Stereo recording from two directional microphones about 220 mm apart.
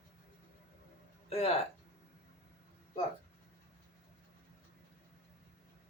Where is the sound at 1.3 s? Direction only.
25° left (ahead or behind).